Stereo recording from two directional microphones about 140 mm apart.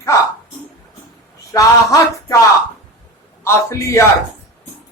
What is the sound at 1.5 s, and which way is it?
Speech, 25° left (ahead or behind).